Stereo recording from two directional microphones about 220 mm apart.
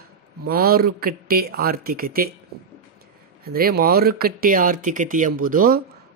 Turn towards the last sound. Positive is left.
turn(degrees=-40)  # may be behind; listen again after turning